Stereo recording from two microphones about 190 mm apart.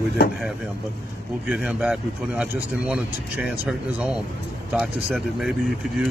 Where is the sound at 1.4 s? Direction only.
5° right (ahead or behind).